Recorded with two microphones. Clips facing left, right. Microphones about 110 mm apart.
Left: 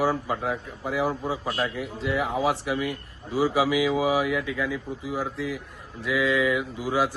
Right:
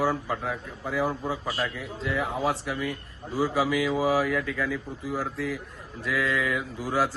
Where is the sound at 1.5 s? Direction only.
50° left (ahead or behind).